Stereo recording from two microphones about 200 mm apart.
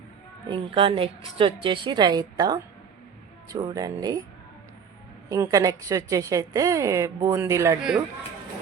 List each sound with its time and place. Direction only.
0.4 s a woman's voice: 25° right (ahead or behind)
5.3 s a woman's voice: 15° right (ahead or behind)